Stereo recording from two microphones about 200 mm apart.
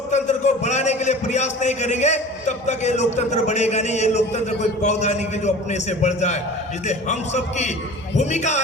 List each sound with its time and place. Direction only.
0.1 s a man's voice: 35° left (ahead or behind)